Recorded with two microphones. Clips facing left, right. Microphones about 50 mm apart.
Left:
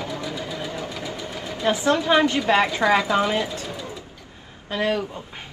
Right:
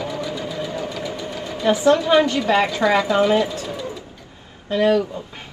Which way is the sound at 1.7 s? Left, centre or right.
Left.